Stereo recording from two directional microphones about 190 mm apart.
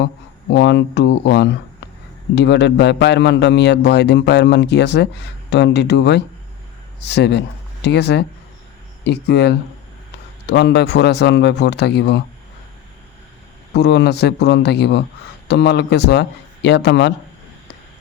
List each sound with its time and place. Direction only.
0.5 s a man's voice: 70° left (ahead or behind)
13.7 s a man's voice: 65° left (ahead or behind)